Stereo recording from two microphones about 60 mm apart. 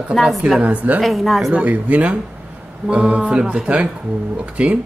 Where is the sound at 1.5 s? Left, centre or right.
Right.